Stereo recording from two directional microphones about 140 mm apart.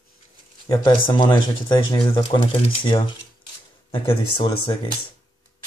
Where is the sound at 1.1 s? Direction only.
35° left (ahead or behind).